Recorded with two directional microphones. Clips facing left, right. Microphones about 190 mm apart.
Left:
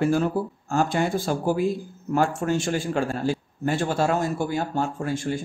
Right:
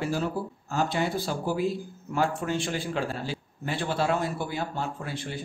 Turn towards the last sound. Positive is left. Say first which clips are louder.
# left 8 dB
turn(degrees=45)  # may be behind; listen again after turning